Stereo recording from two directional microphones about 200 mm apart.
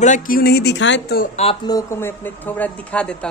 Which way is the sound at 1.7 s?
15° left (ahead or behind).